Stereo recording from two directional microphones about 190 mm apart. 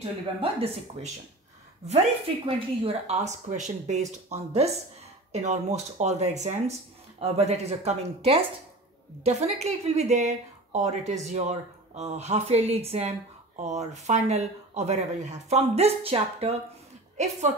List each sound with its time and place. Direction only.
0.0 s speech: 30° right (ahead or behind)
2.4 s speech: 30° right (ahead or behind)